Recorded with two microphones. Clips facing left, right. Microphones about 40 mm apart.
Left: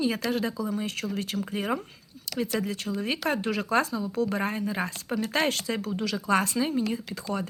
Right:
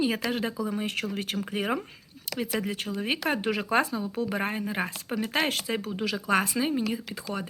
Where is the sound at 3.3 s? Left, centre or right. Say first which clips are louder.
Even; right.